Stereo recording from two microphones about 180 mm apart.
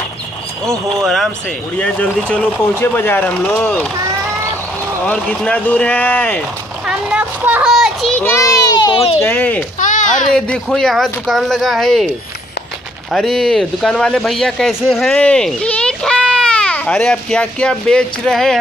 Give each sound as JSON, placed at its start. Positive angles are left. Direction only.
{"t": 1.0, "sound": "a child's voice", "side_deg": 0}
{"t": 5.0, "sound": "a child's voice", "side_deg": 5}
{"t": 6.9, "sound": "a child's voice", "side_deg": -5}
{"t": 9.2, "sound": "a child's voice", "side_deg": 10}
{"t": 9.8, "sound": "a sound", "side_deg": 45}
{"t": 10.3, "sound": "speech", "side_deg": 5}
{"t": 13.1, "sound": "speech", "side_deg": 0}